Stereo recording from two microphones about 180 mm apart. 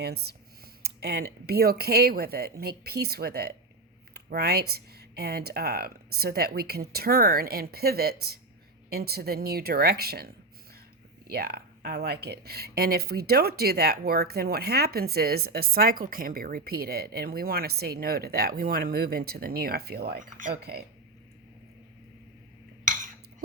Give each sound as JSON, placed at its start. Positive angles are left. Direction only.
{"t": 0.0, "sound": "speech", "side_deg": -65}
{"t": 20.6, "sound": "speech", "side_deg": -60}